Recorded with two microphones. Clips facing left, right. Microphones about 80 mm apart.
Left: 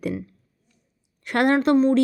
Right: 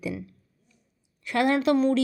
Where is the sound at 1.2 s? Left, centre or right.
Left.